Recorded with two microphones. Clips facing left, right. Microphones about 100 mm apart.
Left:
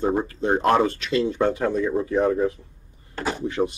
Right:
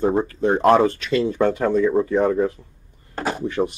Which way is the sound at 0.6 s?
25° right (ahead or behind).